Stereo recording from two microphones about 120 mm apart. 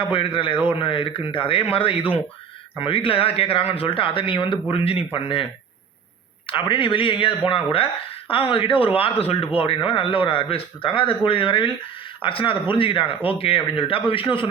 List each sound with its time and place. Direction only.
0.0 s speech: 45° left (ahead or behind)
6.5 s speech: 40° left (ahead or behind)